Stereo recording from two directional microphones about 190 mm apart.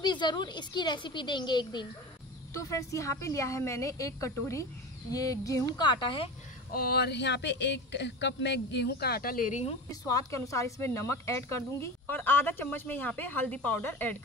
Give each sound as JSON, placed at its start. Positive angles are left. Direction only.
{"t": 0.0, "sound": "a woman's voice", "side_deg": 25}
{"t": 6.7, "sound": "speech", "side_deg": 55}
{"t": 9.8, "sound": "speech", "side_deg": 15}